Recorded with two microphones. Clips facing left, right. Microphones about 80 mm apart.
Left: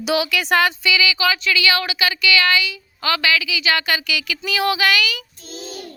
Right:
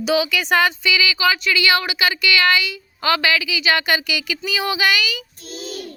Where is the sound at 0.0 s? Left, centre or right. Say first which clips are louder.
Right 1 dB; centre.